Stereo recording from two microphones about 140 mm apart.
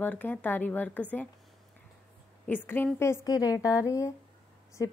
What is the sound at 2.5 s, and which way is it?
A woman's voice, 15° left (ahead or behind).